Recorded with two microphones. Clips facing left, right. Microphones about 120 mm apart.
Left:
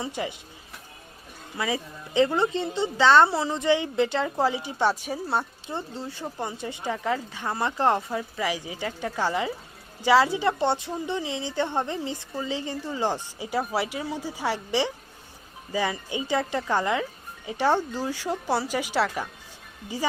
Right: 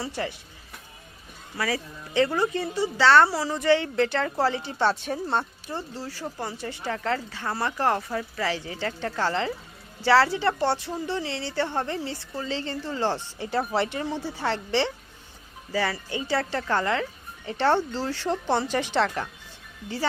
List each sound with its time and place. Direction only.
0.0 s speech: 15° left (ahead or behind)
1.5 s speech: 20° left (ahead or behind)
5.6 s speech: 20° left (ahead or behind)